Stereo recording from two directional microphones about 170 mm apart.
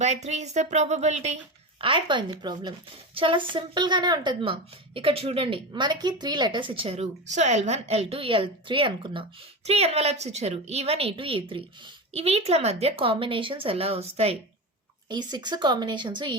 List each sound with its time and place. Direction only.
0.0 s a woman's voice: 40° right (ahead or behind)
1.8 s a woman's voice: 30° right (ahead or behind)
15.1 s a woman's voice: 25° right (ahead or behind)